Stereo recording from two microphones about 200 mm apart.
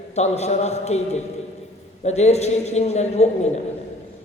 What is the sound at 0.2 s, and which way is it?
A man's voice, 35° left (ahead or behind).